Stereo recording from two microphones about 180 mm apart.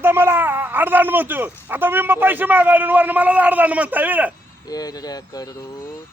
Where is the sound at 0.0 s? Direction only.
10° right (ahead or behind).